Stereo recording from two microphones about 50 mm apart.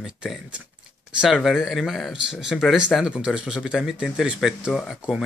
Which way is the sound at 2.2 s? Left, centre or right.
Centre.